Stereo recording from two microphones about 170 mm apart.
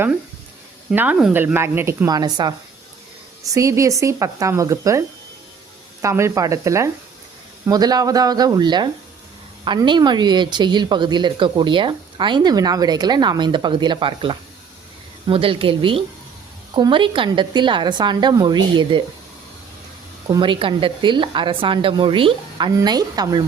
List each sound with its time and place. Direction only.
0.9 s a woman's voice: 10° right (ahead or behind); by 19.0 s 25° right (ahead or behind)
20.2 s speech: 25° right (ahead or behind)